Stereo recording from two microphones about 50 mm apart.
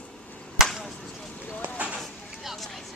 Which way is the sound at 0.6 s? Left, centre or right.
Centre.